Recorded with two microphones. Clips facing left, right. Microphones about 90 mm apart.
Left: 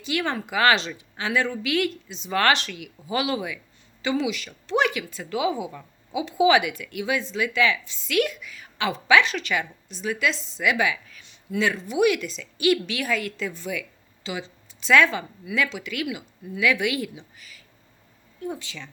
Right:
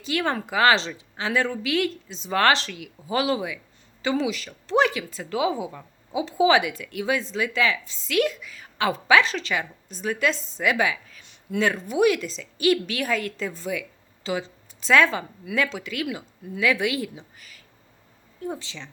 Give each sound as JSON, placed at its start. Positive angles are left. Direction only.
{"t": 0.0, "sound": "speech", "side_deg": -35}
{"t": 9.9, "sound": "speech", "side_deg": -40}
{"t": 11.3, "sound": "a woman's voice", "side_deg": -45}
{"t": 18.4, "sound": "speech", "side_deg": -30}